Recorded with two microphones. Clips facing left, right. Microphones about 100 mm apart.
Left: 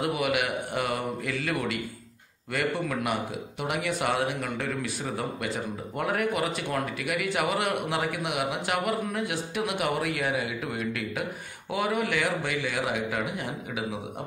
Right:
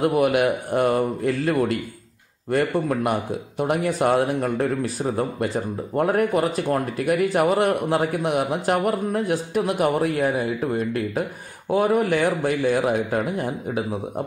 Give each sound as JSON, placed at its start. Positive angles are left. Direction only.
{"t": 0.0, "sound": "speech", "side_deg": -40}